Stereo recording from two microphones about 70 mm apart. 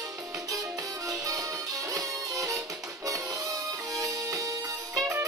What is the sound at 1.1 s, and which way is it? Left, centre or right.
Music, right.